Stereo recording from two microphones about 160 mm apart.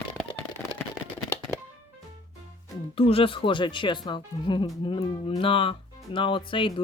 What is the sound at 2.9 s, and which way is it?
Speech, 35° left (ahead or behind).